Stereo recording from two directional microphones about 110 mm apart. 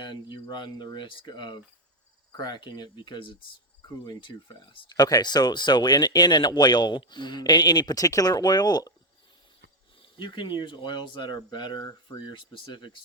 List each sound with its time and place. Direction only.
0.0 s speech: 40° left (ahead or behind)
10.0 s speech: 45° left (ahead or behind)